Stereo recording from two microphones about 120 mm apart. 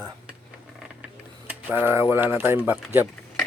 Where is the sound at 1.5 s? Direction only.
15° right (ahead or behind).